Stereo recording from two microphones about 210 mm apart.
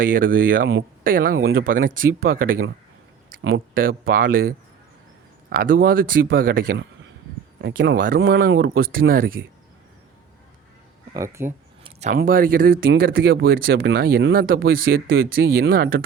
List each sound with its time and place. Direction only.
0.0 s speech: 40° right (ahead or behind)
1.4 s speech: 75° right (ahead or behind)
1.6 s speech: 40° right (ahead or behind)
3.8 s speech: 45° right (ahead or behind)
11.1 s speech: 15° right (ahead or behind)
11.8 s speech: 35° right (ahead or behind)